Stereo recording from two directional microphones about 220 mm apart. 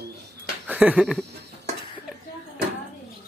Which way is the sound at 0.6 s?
5° right (ahead or behind).